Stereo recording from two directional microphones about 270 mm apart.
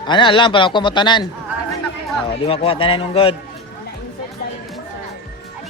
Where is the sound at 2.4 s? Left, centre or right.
Left.